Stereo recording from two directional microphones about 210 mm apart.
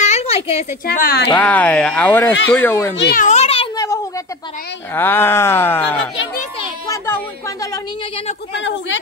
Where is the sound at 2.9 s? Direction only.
50° left (ahead or behind).